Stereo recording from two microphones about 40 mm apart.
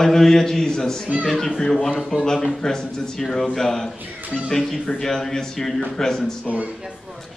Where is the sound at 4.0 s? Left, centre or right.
Right.